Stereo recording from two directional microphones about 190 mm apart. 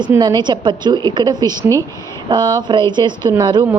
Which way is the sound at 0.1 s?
20° right (ahead or behind).